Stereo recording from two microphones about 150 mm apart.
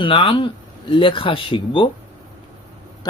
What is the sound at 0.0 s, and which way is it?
Speech, 35° left (ahead or behind).